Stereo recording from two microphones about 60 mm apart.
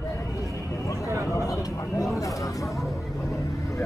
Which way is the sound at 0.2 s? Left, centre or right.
Left.